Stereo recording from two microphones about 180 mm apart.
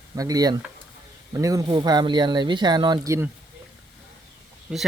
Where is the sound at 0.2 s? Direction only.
20° right (ahead or behind).